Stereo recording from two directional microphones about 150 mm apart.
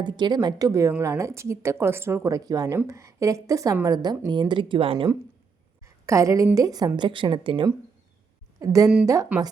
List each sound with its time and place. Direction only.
0.0 s a woman's voice: 30° right (ahead or behind)
5.8 s a woman's voice: 20° right (ahead or behind)
8.5 s a woman's voice: 20° right (ahead or behind)
9.3 s speech: 10° right (ahead or behind)